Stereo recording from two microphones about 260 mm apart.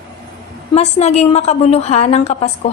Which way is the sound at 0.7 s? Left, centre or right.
Left.